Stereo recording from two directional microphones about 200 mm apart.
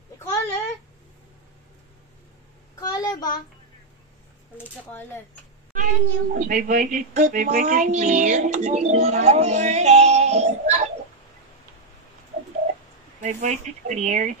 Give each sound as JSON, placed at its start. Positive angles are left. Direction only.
{"t": 0.2, "sound": "a sound", "side_deg": 15}
{"t": 2.9, "sound": "child singing", "side_deg": 20}
{"t": 5.8, "sound": "a child's voice", "side_deg": -40}
{"t": 13.2, "sound": "a child's voice", "side_deg": -35}